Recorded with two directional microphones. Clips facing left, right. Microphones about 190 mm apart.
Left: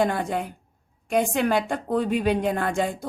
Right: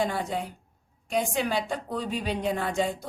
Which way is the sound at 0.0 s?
55° left (ahead or behind).